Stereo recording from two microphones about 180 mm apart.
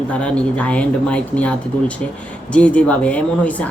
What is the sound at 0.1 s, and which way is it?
Speech, 5° left (ahead or behind).